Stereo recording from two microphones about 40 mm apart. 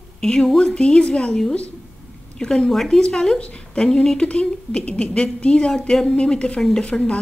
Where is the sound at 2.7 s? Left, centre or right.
Centre.